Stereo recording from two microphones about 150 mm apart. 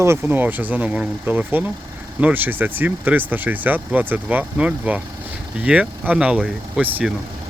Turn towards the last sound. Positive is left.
turn(degrees=-5)  # may be behind; listen again after turning